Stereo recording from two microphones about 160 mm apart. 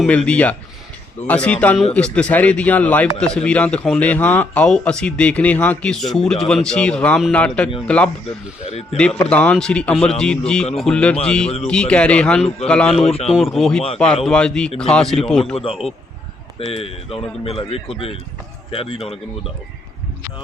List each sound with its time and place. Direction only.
0.1 s a man's voice: 10° left (ahead or behind)
13.0 s speech: 40° left (ahead or behind)
13.3 s a man's voice: centre (ahead or behind)
16.7 s speech: 35° left (ahead or behind)